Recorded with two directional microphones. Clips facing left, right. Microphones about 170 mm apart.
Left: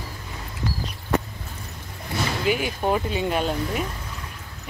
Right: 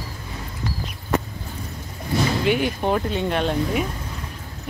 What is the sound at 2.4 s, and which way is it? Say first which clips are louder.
Speech: right 2 dB; centre (ahead or behind).